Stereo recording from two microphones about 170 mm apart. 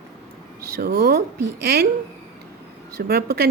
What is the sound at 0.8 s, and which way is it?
Speech, 70° right (ahead or behind).